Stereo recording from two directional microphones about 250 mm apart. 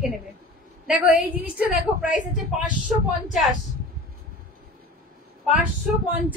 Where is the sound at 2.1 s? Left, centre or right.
Left.